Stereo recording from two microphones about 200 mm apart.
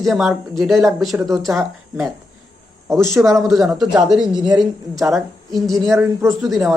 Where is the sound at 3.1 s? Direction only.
15° right (ahead or behind).